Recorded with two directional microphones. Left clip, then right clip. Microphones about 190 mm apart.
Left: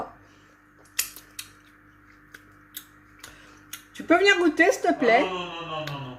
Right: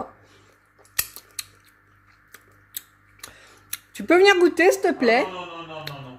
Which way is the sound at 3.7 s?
50° right (ahead or behind).